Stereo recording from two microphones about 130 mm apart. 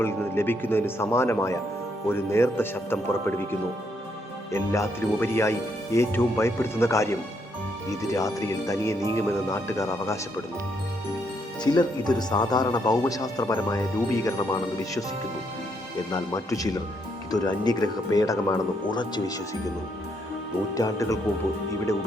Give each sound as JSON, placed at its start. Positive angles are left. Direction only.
{"t": 0.0, "sound": "speech", "side_deg": 15}
{"t": 4.5, "sound": "speech", "side_deg": 20}
{"t": 11.6, "sound": "speech", "side_deg": 35}
{"t": 16.1, "sound": "speech", "side_deg": 25}
{"t": 20.7, "sound": "speech", "side_deg": 25}